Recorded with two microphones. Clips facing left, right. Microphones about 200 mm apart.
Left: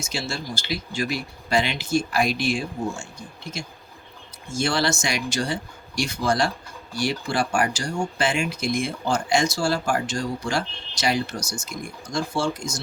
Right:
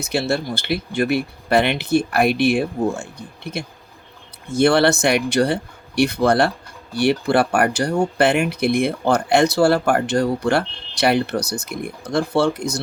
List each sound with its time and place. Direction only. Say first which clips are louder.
0.0 s speech: right 9 dB; 60° right (ahead or behind)